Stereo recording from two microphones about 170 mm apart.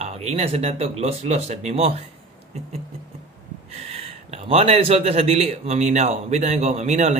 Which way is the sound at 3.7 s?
40° right (ahead or behind).